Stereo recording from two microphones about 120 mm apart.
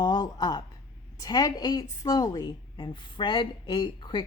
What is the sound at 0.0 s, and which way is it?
A woman's voice, 35° left (ahead or behind).